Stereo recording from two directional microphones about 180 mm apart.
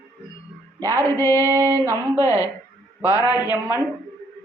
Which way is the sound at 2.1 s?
15° left (ahead or behind).